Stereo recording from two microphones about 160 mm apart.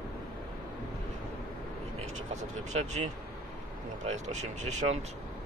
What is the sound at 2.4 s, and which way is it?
Speech, 45° right (ahead or behind).